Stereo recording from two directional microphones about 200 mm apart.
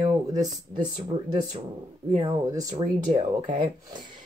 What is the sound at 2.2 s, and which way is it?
Speech, 15° right (ahead or behind).